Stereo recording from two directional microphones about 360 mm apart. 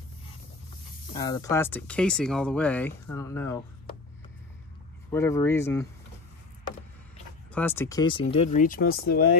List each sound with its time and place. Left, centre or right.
1.1 s speech: centre
5.1 s speech: centre
7.5 s speech: centre; by 9.4 s left